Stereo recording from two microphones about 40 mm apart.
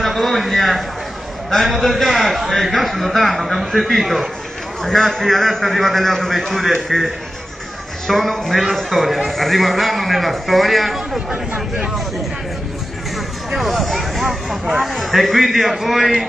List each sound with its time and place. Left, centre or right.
0.0 s a sound: centre
1.5 s a man's voice: centre
4.8 s a man's voice: centre
8.1 s a man's voice: centre
13.6 s a man's voice: centre